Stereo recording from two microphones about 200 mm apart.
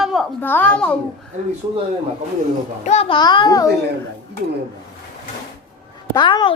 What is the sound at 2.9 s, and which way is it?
Speech, 30° left (ahead or behind).